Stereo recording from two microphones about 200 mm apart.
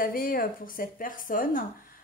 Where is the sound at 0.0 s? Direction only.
45° left (ahead or behind).